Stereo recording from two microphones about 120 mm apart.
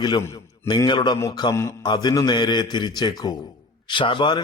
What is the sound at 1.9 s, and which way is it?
A man's voice, 35° left (ahead or behind).